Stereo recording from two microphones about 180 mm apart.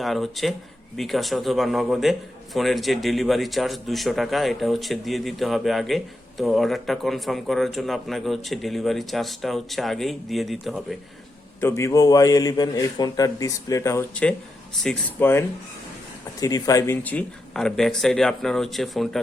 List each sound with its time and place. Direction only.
0.0 s a man's voice: centre (ahead or behind)
11.6 s a man's voice: 15° left (ahead or behind)
16.4 s a man's voice: 20° left (ahead or behind); by 19.2 s centre (ahead or behind)